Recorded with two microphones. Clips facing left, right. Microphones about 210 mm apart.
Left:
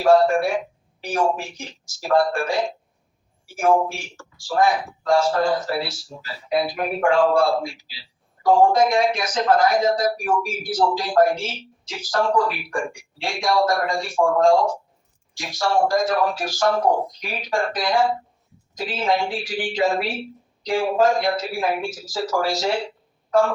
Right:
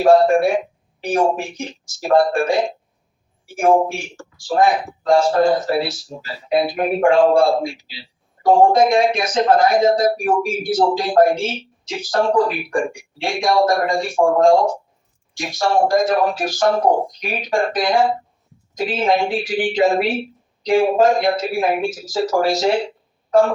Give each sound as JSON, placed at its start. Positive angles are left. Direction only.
{"t": 0.0, "sound": "speech", "side_deg": -20}